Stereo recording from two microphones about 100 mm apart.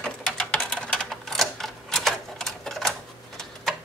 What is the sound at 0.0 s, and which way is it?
Typewriter, 10° left (ahead or behind).